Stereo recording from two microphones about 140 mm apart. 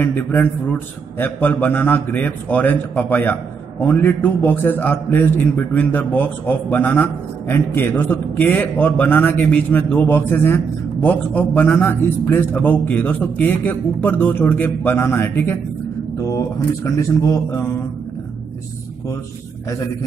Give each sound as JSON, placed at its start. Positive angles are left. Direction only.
{"t": 0.0, "sound": "a man's voice", "side_deg": 15}